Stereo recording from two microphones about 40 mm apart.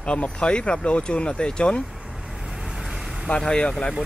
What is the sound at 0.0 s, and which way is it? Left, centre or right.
Speech, left.